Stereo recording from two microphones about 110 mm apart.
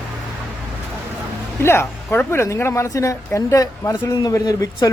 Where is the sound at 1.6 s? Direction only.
20° left (ahead or behind).